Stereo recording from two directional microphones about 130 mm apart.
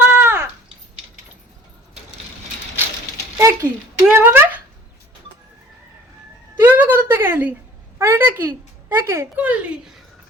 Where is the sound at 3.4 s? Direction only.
20° right (ahead or behind).